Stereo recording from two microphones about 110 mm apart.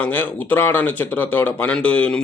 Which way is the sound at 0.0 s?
15° left (ahead or behind).